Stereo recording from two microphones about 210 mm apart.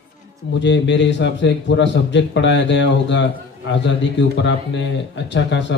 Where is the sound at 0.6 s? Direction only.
60° left (ahead or behind).